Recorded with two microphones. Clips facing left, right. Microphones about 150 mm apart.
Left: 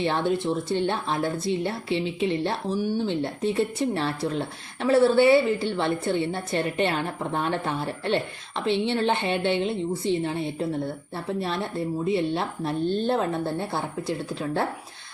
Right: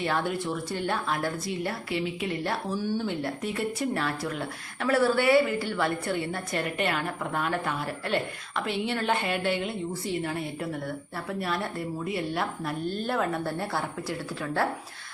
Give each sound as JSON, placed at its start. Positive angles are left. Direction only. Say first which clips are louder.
{"t": 0.0, "sound": "a woman's voice", "louder": "left 4 dB", "side_deg": 25}